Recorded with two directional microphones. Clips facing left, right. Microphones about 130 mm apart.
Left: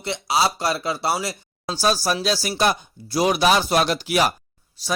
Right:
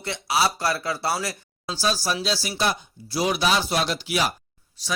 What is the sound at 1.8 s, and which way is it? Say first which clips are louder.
Speech: left 4 dB; 50° left (ahead or behind).